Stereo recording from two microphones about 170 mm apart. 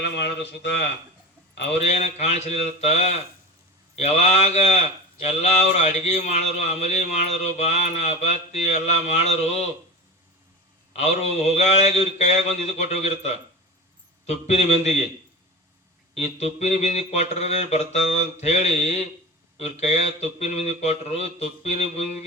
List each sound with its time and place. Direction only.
0.0 s a man's voice: 75° left (ahead or behind)
1.8 s speech: 40° left (ahead or behind)
10.9 s speech: 40° left (ahead or behind)
16.1 s speech: 40° left (ahead or behind)